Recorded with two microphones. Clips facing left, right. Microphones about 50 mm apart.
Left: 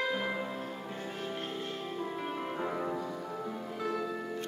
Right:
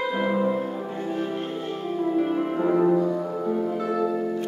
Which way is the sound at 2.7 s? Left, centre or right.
Right.